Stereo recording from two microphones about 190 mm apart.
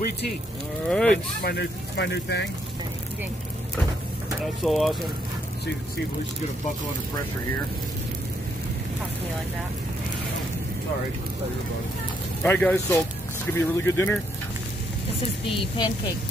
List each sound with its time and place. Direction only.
0.8 s speech: 5° left (ahead or behind)
1.4 s speech: 60° left (ahead or behind)
4.6 s speech: centre (ahead or behind)
12.4 s speech: 10° left (ahead or behind)
15.4 s speech: 30° left (ahead or behind)